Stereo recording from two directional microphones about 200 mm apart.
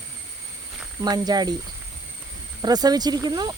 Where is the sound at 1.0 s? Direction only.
20° right (ahead or behind).